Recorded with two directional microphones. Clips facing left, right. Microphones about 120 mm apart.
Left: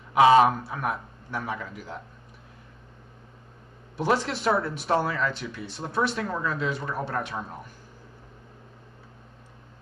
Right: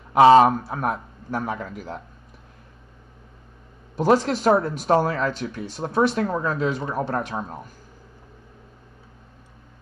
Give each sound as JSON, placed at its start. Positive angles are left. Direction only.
{"t": 0.1, "sound": "speech", "side_deg": -35}
{"t": 3.9, "sound": "speech", "side_deg": -40}